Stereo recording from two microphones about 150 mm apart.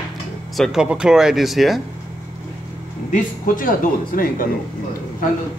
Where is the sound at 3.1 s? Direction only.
65° left (ahead or behind).